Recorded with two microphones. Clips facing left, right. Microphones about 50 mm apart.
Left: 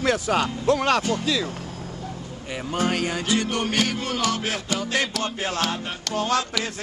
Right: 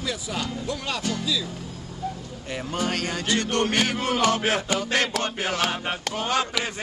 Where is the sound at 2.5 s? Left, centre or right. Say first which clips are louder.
Left 3 dB; centre.